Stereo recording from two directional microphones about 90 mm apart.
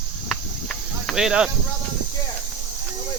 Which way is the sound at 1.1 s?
10° right (ahead or behind).